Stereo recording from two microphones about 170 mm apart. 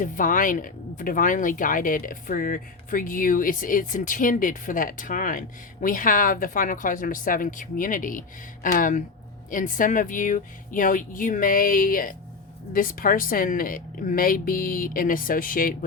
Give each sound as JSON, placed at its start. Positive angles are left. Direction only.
{"t": 0.0, "sound": "a woman's voice", "side_deg": 50}